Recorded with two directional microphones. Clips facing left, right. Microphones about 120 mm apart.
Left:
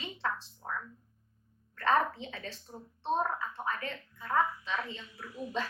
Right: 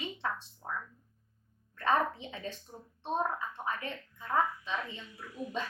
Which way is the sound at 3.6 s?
20° right (ahead or behind).